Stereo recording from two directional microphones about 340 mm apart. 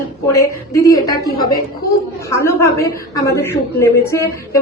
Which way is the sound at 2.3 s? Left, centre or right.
Centre.